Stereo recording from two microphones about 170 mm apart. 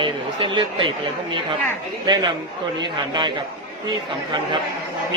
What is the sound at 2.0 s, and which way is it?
Speech, 25° right (ahead or behind).